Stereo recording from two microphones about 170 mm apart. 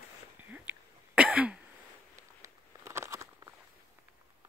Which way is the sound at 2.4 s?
15° right (ahead or behind).